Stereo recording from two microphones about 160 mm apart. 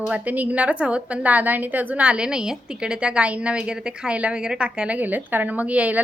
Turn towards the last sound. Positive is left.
turn(degrees=-10)  # may be behind; listen again after turning